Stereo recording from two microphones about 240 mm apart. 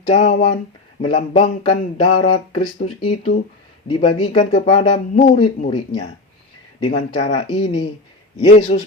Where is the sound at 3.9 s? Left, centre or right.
Left.